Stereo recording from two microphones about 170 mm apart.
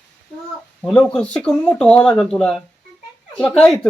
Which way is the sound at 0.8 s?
5° left (ahead or behind).